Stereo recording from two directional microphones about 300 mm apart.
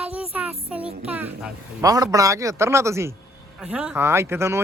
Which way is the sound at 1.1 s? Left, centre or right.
Centre.